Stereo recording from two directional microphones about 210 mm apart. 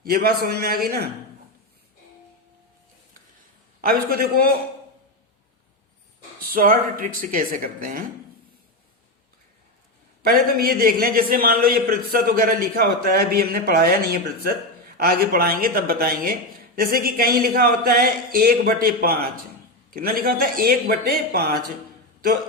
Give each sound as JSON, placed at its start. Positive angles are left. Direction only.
{"t": 0.0, "sound": "speech", "side_deg": -45}
{"t": 3.8, "sound": "speech", "side_deg": -45}
{"t": 6.4, "sound": "speech", "side_deg": -40}
{"t": 10.2, "sound": "speech", "side_deg": -45}